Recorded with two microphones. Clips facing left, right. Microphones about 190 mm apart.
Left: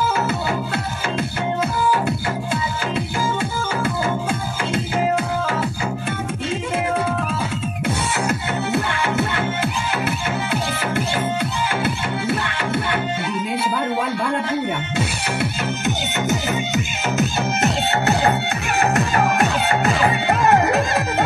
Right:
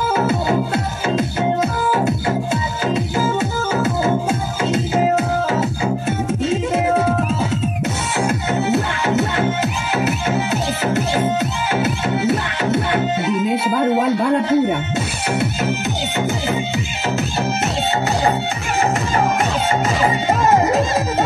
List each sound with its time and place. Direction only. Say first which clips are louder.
0.2 s music: right 5 dB; 25° right (ahead or behind)
1.6 s music: right 2 dB; 25° right (ahead or behind)
3.3 s music: right 4 dB; 25° right (ahead or behind)
7.8 s music: right 2 dB; 25° right (ahead or behind)
12.2 s music: right 4 dB; 25° right (ahead or behind)
14.0 s a sound: right 6 dB; 25° right (ahead or behind)
16.2 s music: right 3 dB; 30° right (ahead or behind)